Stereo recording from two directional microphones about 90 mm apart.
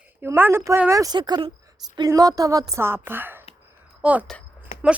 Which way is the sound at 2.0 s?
40° right (ahead or behind).